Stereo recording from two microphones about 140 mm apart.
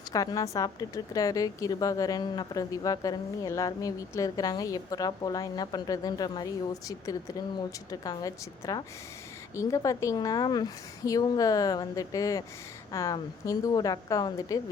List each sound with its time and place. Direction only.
0.1 s a woman's voice: 25° left (ahead or behind)